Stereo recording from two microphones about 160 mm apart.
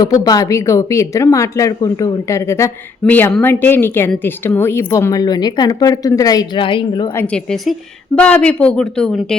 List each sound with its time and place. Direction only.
0.0 s a woman's voice: 25° left (ahead or behind)
7.2 s a woman's voice: 5° left (ahead or behind)